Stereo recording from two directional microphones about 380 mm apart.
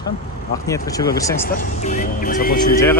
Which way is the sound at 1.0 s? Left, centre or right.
Left.